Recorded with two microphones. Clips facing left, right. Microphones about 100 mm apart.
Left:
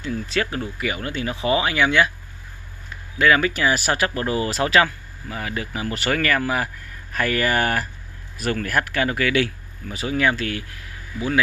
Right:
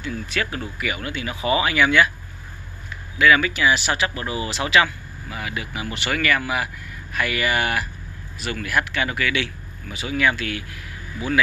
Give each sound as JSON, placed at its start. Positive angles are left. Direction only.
{"t": 0.0, "sound": "speech", "side_deg": 30}
{"t": 3.2, "sound": "speech", "side_deg": 35}